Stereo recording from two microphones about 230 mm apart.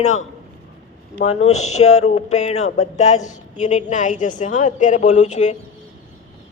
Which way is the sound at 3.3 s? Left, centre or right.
Left.